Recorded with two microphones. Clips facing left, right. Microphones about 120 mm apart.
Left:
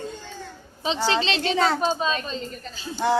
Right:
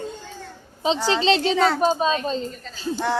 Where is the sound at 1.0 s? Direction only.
30° right (ahead or behind).